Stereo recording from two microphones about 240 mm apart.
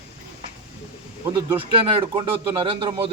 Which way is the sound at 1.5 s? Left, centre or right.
Right.